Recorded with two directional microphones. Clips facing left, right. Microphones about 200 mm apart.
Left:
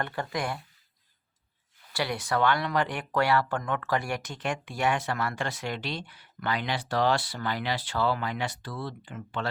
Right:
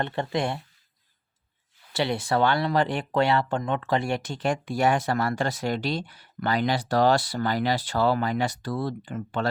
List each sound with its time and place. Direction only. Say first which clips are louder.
0.0 s speech: right 5 dB; 25° right (ahead or behind)
1.9 s speech: right 4 dB; 25° right (ahead or behind); by 9.5 s 40° right (ahead or behind)